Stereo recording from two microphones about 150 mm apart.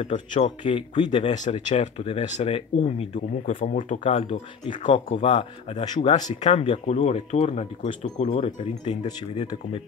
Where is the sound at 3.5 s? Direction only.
65° left (ahead or behind); by 4.8 s 40° left (ahead or behind).